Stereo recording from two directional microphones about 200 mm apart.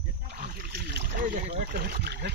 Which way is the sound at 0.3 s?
50° right (ahead or behind).